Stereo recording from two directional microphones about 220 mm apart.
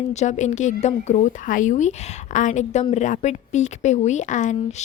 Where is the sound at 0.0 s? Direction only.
30° left (ahead or behind).